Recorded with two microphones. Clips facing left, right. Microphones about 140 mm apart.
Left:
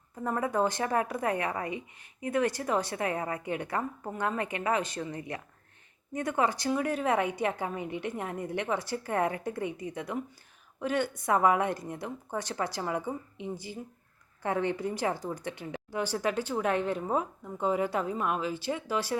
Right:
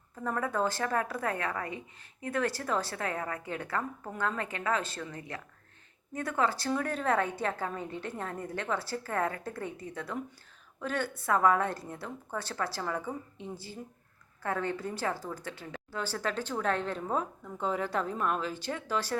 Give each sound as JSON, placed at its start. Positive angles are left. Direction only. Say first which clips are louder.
{"t": 0.2, "sound": "speech", "louder": "left 3 dB", "side_deg": 15}